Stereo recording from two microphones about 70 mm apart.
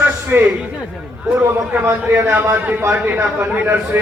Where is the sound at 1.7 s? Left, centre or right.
Right.